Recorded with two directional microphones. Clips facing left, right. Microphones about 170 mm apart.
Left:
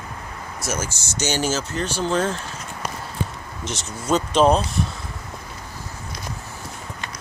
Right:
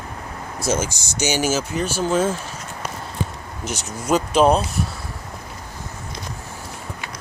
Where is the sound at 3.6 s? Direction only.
10° right (ahead or behind).